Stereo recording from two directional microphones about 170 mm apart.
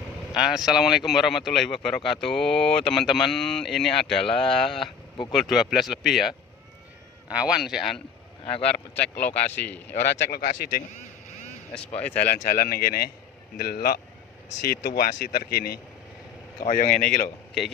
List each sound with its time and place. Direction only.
0.4 s speech: 5° right (ahead or behind)
4.8 s speech: 25° left (ahead or behind)
5.3 s speech: centre (ahead or behind)
10.0 s speech: 70° left (ahead or behind)
12.0 s speech: 10° left (ahead or behind)
12.3 s speech: 55° left (ahead or behind)
16.9 s speech: 5° left (ahead or behind)